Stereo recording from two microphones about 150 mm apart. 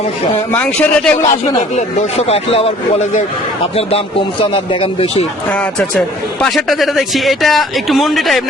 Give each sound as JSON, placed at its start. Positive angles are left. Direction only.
{"t": 0.5, "sound": "a man's voice", "side_deg": 5}
{"t": 1.7, "sound": "speech", "side_deg": 45}
{"t": 5.5, "sound": "a man's voice", "side_deg": 10}